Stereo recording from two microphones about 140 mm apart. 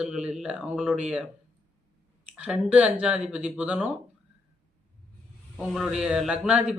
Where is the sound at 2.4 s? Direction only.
10° right (ahead or behind).